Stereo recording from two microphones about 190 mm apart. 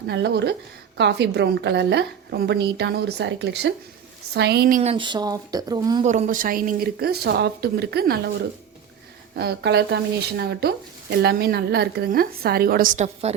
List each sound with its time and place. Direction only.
0.1 s a woman's voice: 65° right (ahead or behind)
4.8 s speech: 30° right (ahead or behind)
6.0 s a woman's voice: 35° right (ahead or behind); by 8.3 s 55° right (ahead or behind)
9.3 s a woman's voice: 60° right (ahead or behind); by 13.3 s 40° right (ahead or behind)